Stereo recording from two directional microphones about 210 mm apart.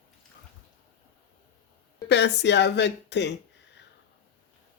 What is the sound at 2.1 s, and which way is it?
A woman's voice, 55° left (ahead or behind).